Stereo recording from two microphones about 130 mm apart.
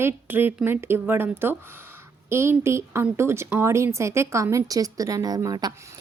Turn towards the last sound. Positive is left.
turn(degrees=-30)  # may be behind; listen again after turning